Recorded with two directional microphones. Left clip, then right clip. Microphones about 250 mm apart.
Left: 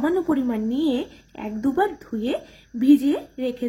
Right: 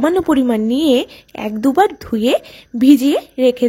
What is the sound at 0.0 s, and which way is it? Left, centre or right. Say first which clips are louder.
A woman's voice: right 8 dB; right.